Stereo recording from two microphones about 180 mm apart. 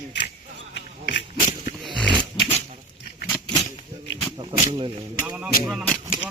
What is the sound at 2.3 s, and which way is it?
Pig, 30° left (ahead or behind).